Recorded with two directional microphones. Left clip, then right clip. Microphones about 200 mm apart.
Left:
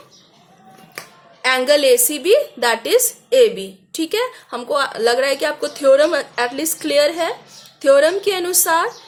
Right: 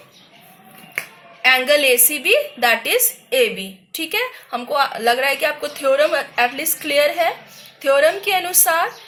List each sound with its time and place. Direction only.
1.4 s a woman's voice: 45° left (ahead or behind)